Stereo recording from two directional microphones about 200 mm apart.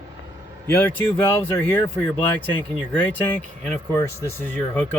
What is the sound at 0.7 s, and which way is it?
Speech, 10° left (ahead or behind).